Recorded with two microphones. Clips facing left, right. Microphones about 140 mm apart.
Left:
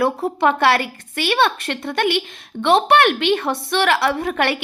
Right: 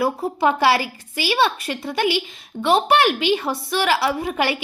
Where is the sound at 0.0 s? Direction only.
5° right (ahead or behind).